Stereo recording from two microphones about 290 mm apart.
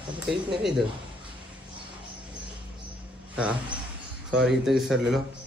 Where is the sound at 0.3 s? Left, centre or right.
Centre.